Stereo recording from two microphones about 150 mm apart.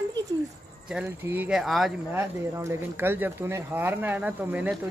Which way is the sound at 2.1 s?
20° right (ahead or behind).